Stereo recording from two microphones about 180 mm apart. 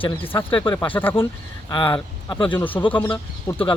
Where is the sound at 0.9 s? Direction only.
10° left (ahead or behind).